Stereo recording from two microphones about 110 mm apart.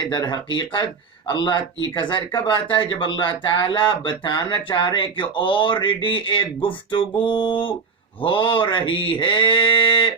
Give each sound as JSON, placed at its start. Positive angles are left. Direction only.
{"t": 0.1, "sound": "speech", "side_deg": 45}